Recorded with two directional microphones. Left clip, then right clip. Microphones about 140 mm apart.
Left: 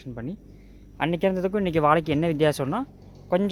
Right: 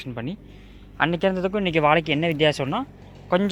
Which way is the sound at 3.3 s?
35° left (ahead or behind).